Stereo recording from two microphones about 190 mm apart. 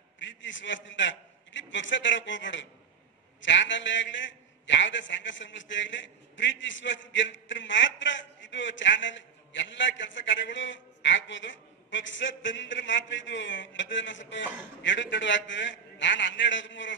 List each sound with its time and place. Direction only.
0.2 s a man's voice: 75° left (ahead or behind)